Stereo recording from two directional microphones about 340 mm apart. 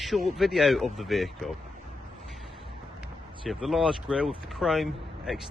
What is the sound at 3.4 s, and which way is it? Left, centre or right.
Speech, centre.